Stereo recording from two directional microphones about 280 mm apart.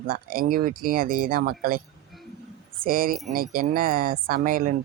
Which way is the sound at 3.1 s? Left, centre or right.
Centre.